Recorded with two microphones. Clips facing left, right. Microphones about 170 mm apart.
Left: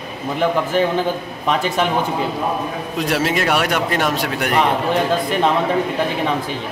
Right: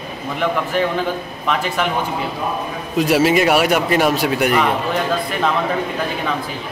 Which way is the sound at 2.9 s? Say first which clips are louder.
Right 6 dB; 5° right (ahead or behind).